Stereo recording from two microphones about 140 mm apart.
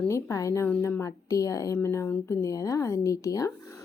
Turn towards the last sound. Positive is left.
turn(degrees=20)  # may be behind; listen again after turning